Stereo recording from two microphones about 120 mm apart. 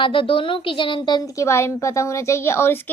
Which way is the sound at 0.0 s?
45° left (ahead or behind).